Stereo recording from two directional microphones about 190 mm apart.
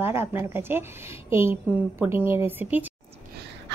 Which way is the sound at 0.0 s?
10° right (ahead or behind).